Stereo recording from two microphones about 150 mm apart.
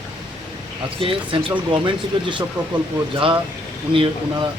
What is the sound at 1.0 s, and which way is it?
Speech, 35° right (ahead or behind).